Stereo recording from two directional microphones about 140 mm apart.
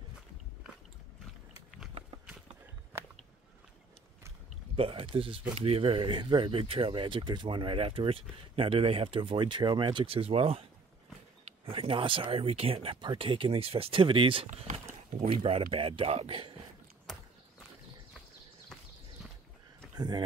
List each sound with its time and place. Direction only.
2.9 s biting: 15° right (ahead or behind)
4.7 s speech: 40° right (ahead or behind)
11.6 s speech: 40° right (ahead or behind)
15.7 s speech: 40° right (ahead or behind)
20.0 s speech: 30° right (ahead or behind)